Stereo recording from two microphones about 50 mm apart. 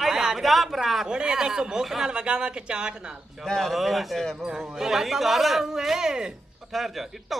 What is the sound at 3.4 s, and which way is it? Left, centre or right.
A woman's voice, centre.